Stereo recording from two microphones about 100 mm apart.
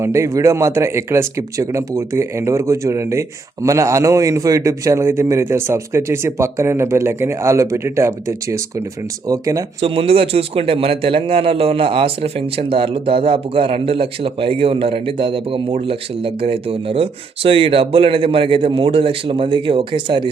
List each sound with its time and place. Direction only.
0.0 s speech: 30° right (ahead or behind)
9.8 s a man's voice: 75° right (ahead or behind); by 20.3 s 55° right (ahead or behind)